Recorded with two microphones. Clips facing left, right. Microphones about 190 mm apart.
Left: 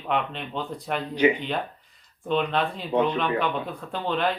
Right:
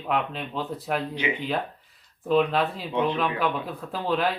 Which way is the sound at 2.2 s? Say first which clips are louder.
Right 3 dB; 5° right (ahead or behind).